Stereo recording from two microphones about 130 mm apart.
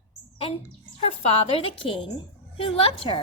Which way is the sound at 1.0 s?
45° left (ahead or behind).